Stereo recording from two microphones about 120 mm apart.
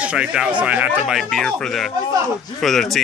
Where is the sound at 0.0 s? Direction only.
10° right (ahead or behind).